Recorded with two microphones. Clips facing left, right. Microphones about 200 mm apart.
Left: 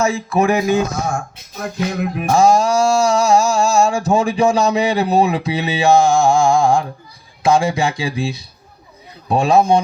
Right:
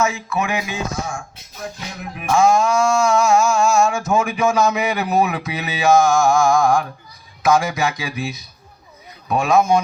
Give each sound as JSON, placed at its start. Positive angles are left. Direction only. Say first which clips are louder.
{"t": 0.0, "sound": "music", "louder": "left 5 dB", "side_deg": 35}
{"t": 2.1, "sound": "music", "louder": "left 2 dB", "side_deg": 35}
{"t": 7.4, "sound": "speech", "louder": "left 2 dB", "side_deg": 30}
{"t": 9.3, "sound": "music", "louder": "left 3 dB", "side_deg": 30}